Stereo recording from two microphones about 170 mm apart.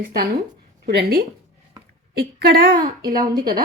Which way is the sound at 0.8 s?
75° right (ahead or behind).